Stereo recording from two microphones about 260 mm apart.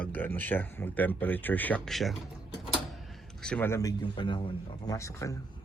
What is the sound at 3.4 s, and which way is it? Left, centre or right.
Speech, centre.